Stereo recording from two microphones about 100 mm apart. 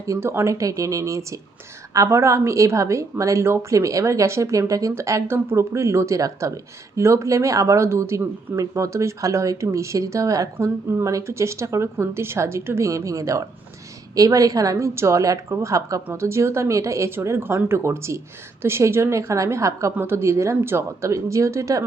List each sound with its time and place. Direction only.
0.0 s a woman's voice: 30° right (ahead or behind)